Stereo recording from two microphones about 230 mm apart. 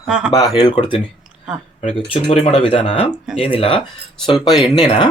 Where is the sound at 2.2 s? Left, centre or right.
Left.